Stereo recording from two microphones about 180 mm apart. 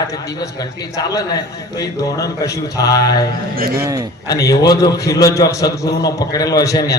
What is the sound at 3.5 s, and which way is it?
Speech, 55° right (ahead or behind).